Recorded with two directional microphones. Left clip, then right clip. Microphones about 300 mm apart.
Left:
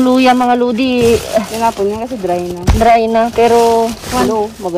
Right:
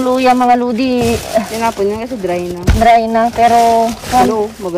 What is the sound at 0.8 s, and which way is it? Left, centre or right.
Speech, left.